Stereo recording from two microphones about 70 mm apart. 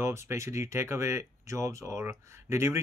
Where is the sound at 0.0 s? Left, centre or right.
Right.